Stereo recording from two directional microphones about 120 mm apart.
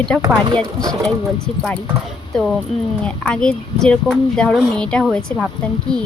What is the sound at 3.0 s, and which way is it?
Speech, 10° left (ahead or behind).